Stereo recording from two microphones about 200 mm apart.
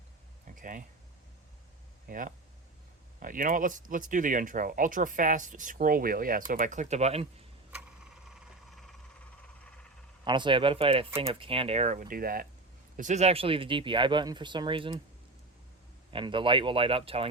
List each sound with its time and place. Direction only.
0.4 s a sound: 40° right (ahead or behind)
2.0 s speech: 40° right (ahead or behind)
7.7 s a sound: 5° right (ahead or behind)
10.2 s speech: 25° right (ahead or behind); by 12.5 s 45° right (ahead or behind)
13.0 s speech: 35° right (ahead or behind)
16.1 s speech: 25° right (ahead or behind)